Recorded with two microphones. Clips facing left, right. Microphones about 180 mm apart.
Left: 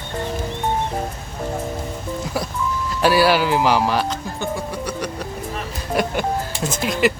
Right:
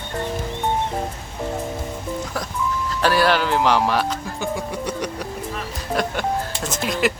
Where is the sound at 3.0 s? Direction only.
10° left (ahead or behind).